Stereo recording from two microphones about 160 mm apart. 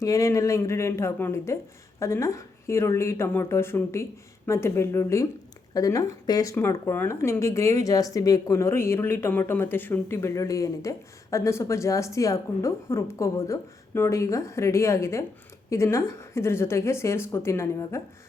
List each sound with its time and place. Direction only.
0.0 s speech: 20° left (ahead or behind)